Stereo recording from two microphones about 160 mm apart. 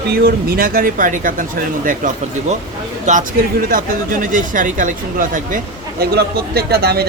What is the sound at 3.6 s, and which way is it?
Speech, 60° right (ahead or behind).